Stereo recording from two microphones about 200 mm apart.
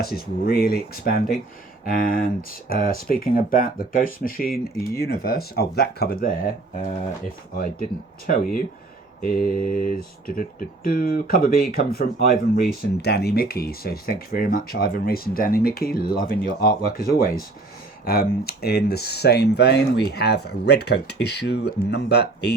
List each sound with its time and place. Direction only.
0.0 s speech: 50° left (ahead or behind)
7.5 s speech: 45° left (ahead or behind)
9.2 s speech: 45° left (ahead or behind)